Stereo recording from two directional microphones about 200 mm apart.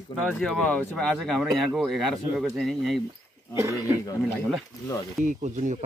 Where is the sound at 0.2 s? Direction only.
Centre (ahead or behind).